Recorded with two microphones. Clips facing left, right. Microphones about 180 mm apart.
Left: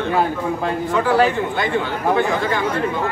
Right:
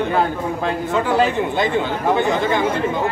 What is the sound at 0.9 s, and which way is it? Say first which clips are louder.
A man's voice: left 2 dB; 20° right (ahead or behind).